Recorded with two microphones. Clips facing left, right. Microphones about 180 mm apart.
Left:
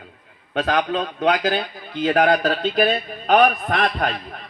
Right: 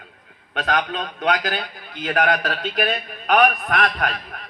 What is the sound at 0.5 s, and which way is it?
A man's voice, 30° left (ahead or behind).